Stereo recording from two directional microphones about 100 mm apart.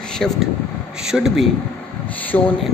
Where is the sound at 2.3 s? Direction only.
25° left (ahead or behind).